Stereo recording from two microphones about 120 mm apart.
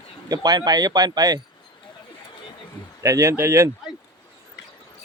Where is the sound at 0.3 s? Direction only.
35° right (ahead or behind).